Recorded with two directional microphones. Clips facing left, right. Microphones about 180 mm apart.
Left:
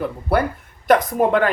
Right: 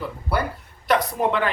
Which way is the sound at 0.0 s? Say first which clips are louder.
Left 6 dB; 55° left (ahead or behind).